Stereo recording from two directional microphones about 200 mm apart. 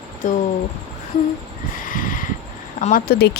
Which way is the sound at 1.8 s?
45° left (ahead or behind).